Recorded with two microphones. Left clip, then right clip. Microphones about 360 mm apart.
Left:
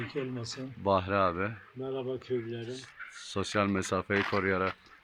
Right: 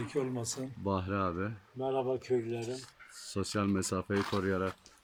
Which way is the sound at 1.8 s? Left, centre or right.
Right.